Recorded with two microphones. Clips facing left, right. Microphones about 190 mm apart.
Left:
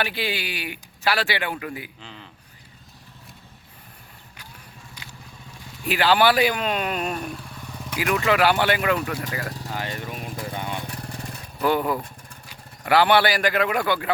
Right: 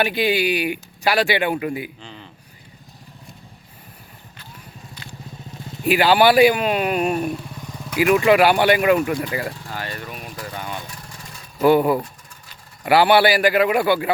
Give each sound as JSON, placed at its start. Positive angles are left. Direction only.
{"t": 0.0, "sound": "speech", "side_deg": -15}
{"t": 2.0, "sound": "a man's voice", "side_deg": 0}
{"t": 5.0, "sound": "vehicle", "side_deg": 10}
{"t": 5.8, "sound": "speech", "side_deg": -15}
{"t": 7.3, "sound": "motorcycle", "side_deg": -20}
{"t": 7.9, "sound": "speech", "side_deg": -15}
{"t": 9.6, "sound": "speech", "side_deg": 20}
{"t": 10.4, "sound": "lawn mower", "side_deg": 25}
{"t": 10.8, "sound": "lawn mower", "side_deg": 60}
{"t": 11.6, "sound": "speech", "side_deg": -10}